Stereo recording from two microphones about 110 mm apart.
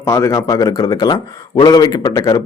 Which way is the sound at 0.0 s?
25° left (ahead or behind).